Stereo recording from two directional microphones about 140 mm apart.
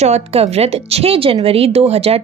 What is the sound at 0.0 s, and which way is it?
Speech, 50° right (ahead or behind).